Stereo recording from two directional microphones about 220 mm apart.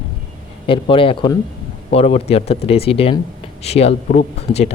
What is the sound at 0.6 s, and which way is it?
Speech, 25° left (ahead or behind).